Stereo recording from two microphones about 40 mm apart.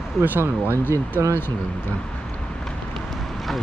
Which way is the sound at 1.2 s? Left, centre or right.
Right.